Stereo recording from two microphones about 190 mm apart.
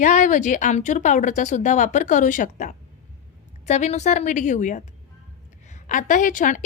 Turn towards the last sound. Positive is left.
turn(degrees=40)  # may be behind; listen again after turning